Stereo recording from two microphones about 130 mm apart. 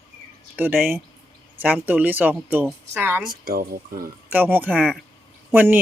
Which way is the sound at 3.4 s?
90° right.